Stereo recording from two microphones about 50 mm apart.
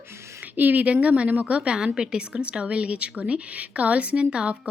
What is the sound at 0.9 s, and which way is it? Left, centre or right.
A woman's voice, right.